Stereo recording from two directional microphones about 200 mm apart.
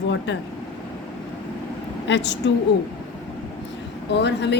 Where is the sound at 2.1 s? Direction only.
60° left (ahead or behind).